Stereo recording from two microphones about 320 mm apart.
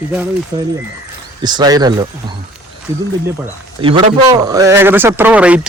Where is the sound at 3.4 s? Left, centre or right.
Centre.